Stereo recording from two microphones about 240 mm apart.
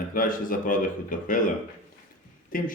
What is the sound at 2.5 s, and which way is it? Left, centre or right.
Speech, left.